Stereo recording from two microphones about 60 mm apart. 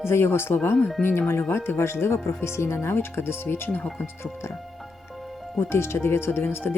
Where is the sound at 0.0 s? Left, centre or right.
Left.